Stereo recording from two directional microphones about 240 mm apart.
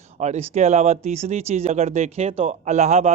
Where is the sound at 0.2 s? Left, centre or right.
Right.